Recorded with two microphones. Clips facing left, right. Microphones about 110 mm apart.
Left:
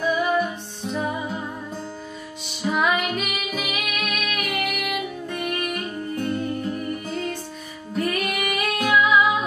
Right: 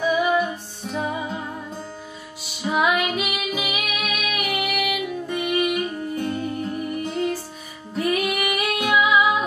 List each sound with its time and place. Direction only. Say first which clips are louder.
0.0 s music: right 1 dB; 5° right (ahead or behind)
2.6 s music: right 1 dB; 5° right (ahead or behind)